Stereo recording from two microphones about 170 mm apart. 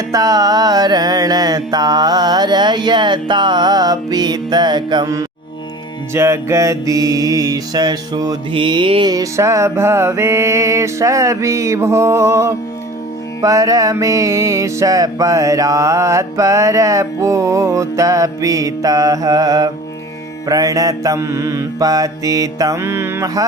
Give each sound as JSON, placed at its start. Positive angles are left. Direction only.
{"t": 0.1, "sound": "music", "side_deg": -20}
{"t": 6.1, "sound": "mantra", "side_deg": -15}
{"t": 13.4, "sound": "music", "side_deg": -20}